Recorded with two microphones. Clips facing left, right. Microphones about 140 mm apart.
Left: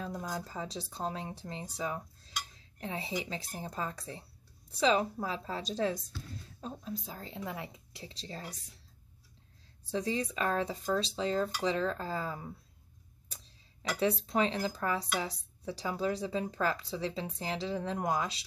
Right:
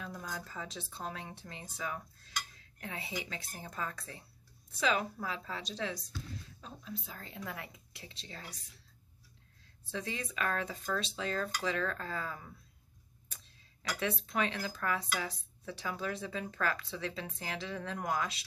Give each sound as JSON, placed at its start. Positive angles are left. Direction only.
{"t": 0.0, "sound": "a woman's voice", "side_deg": 25}
{"t": 7.2, "sound": "speech", "side_deg": 25}
{"t": 9.8, "sound": "speech", "side_deg": 35}
{"t": 13.8, "sound": "speech", "side_deg": 30}